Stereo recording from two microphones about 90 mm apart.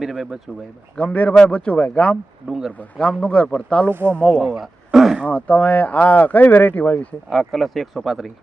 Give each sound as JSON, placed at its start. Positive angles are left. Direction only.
{"t": 0.0, "sound": "speech", "side_deg": -5}
{"t": 0.9, "sound": "speech", "side_deg": 15}
{"t": 2.5, "sound": "speech", "side_deg": -5}
{"t": 3.0, "sound": "speech", "side_deg": 10}
{"t": 4.4, "sound": "a sound", "side_deg": 0}
{"t": 5.2, "sound": "speech", "side_deg": 15}
{"t": 7.3, "sound": "speech", "side_deg": 0}